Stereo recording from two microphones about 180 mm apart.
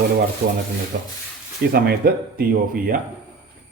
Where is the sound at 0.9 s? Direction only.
65° right (ahead or behind).